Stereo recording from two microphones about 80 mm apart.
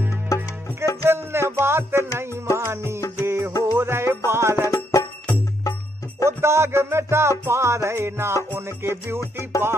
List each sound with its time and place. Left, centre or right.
1.0 s music: right
4.6 s music: left
6.2 s music: right
9.2 s music: left